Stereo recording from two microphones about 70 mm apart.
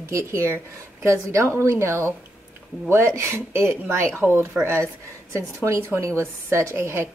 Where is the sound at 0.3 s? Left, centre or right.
Right.